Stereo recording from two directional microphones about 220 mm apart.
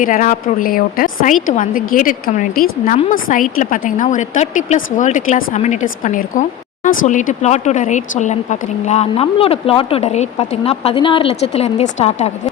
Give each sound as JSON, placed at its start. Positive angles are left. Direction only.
{"t": 0.0, "sound": "speech", "side_deg": 35}